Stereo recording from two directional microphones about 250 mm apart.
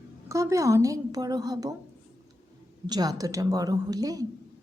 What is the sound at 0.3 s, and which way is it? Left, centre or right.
A woman's voice, centre.